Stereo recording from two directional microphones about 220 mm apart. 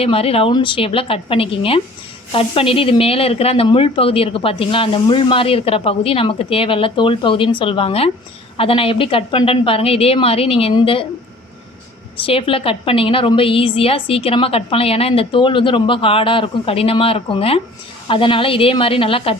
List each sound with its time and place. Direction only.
0.0 s speech: 25° left (ahead or behind)
12.2 s speech: 25° left (ahead or behind)